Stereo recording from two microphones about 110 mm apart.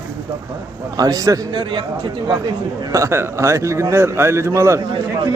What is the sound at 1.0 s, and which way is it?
Speech, 30° right (ahead or behind).